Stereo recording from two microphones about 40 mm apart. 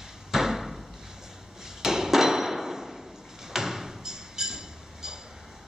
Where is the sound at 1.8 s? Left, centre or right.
Centre.